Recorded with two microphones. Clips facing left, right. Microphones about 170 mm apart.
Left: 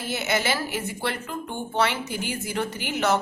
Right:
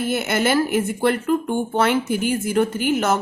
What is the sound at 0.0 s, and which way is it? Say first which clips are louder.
A woman's voice: right 6 dB; 55° right (ahead or behind).